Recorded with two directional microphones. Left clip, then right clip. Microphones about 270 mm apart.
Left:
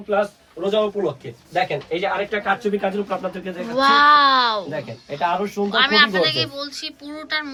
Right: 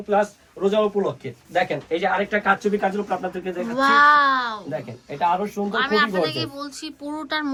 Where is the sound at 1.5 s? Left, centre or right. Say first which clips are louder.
Even; right.